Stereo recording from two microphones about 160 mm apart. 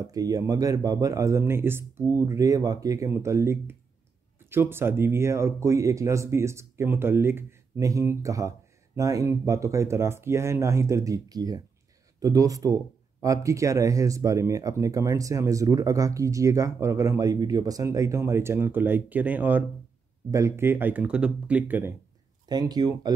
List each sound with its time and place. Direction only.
0.0 s speech: 20° right (ahead or behind)
22.5 s speech: 25° right (ahead or behind)